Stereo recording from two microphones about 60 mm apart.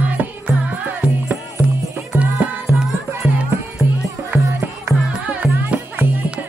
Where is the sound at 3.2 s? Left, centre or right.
Centre.